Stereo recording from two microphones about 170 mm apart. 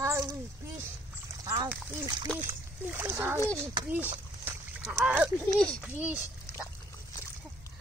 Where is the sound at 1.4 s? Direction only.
20° right (ahead or behind).